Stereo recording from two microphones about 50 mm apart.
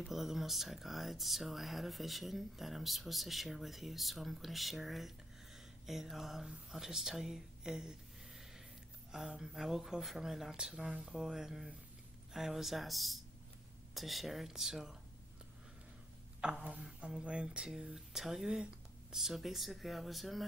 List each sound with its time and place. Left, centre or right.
0.0 s speech: centre
16.3 s a sound: centre
17.1 s speech: right; by 20.4 s centre